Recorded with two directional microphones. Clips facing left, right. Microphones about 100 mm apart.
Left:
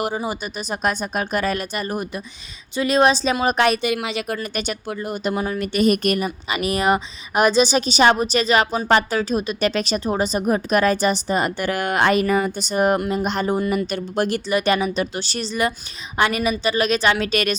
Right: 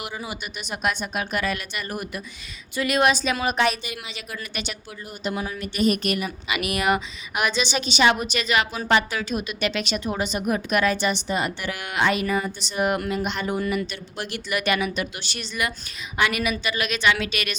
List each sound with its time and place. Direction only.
0.0 s a woman's voice: 35° left (ahead or behind)
3.5 s a woman's voice: 60° left (ahead or behind)
4.4 s speech: 45° left (ahead or behind)